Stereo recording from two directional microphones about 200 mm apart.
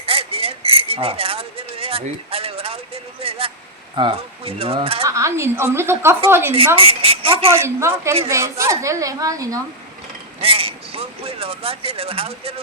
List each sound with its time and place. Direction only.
0.0 s a sound: 30° right (ahead or behind)
3.9 s speech: 25° right (ahead or behind)
5.0 s a woman's voice: 15° right (ahead or behind)
6.7 s a woman's voice: 30° right (ahead or behind)
7.6 s a woman's voice: 15° right (ahead or behind)
10.4 s a sound: 30° right (ahead or behind)